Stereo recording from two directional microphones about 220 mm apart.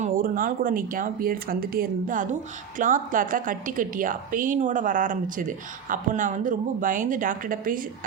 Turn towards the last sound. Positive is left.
turn(degrees=-40)  # may be behind; listen again after turning